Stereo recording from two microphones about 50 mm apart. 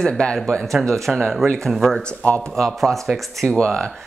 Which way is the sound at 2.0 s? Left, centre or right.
Left.